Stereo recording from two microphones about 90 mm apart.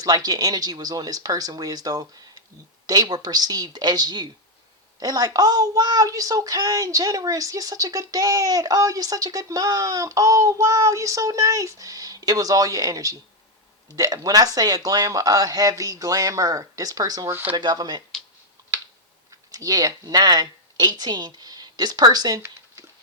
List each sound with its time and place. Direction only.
0.0 s speech: 45° right (ahead or behind)
17.2 s speech: 25° right (ahead or behind)
17.5 s speech: 55° right (ahead or behind)
19.5 s a woman's voice: 45° right (ahead or behind)